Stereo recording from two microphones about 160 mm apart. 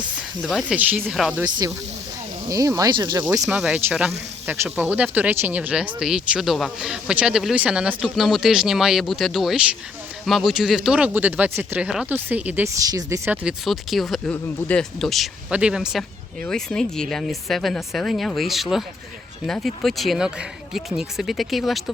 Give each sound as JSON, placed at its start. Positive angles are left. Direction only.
{"t": 0.4, "sound": "a man's voice", "side_deg": 0}
{"t": 0.8, "sound": "speech", "side_deg": -10}
{"t": 1.1, "sound": "a man's voice", "side_deg": 0}
{"t": 1.5, "sound": "speech", "side_deg": -25}
{"t": 3.4, "sound": "a man's voice", "side_deg": -5}
{"t": 12.8, "sound": "a man's voice", "side_deg": -20}